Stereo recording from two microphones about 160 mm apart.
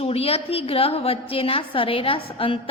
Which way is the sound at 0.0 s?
40° left (ahead or behind).